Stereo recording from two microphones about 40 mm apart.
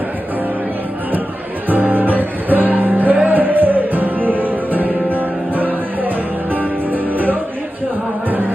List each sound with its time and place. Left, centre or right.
1.7 s music: right